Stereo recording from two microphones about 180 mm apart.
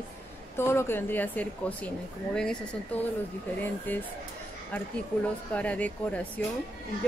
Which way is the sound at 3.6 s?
10° left (ahead or behind).